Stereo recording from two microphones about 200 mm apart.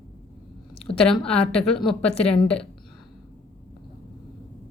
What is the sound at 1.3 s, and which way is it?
Speech, 5° left (ahead or behind).